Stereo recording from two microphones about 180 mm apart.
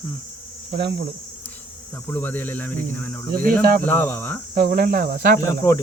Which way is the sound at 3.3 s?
50° right (ahead or behind).